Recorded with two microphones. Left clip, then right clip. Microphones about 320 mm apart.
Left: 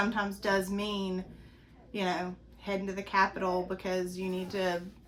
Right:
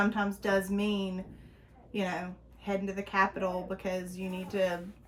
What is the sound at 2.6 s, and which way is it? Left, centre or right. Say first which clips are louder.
Speech: right 1 dB; centre.